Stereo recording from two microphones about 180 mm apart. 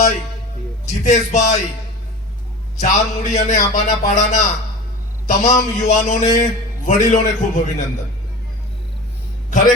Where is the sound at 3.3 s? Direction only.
40° left (ahead or behind).